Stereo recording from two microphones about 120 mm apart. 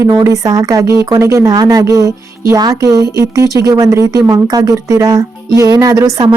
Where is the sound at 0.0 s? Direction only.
25° right (ahead or behind).